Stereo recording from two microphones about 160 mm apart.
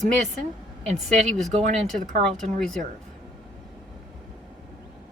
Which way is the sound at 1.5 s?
45° right (ahead or behind).